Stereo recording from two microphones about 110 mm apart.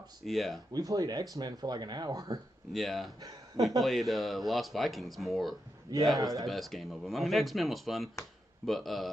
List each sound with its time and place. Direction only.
0.2 s speech: centre (ahead or behind)
0.7 s speech: 35° right (ahead or behind)
2.7 s speech: centre (ahead or behind)
3.2 s speech: 35° right (ahead or behind)
3.8 s speech: centre (ahead or behind)
6.1 s speech: 30° right (ahead or behind)
6.4 s speech: centre (ahead or behind)